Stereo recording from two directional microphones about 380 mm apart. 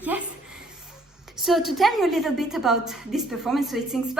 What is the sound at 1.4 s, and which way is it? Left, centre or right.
A woman's voice, centre.